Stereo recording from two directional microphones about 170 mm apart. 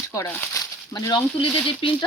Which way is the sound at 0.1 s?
15° left (ahead or behind).